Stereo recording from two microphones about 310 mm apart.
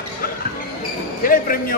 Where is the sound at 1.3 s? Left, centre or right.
Left.